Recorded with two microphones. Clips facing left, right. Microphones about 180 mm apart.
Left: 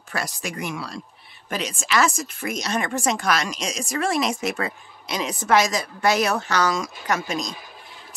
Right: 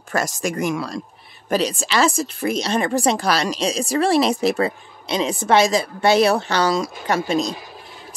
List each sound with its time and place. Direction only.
0.1 s speech: 45° right (ahead or behind)